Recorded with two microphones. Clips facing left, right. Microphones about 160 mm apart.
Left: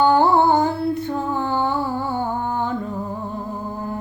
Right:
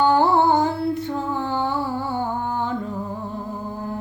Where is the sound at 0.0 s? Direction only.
50° left (ahead or behind).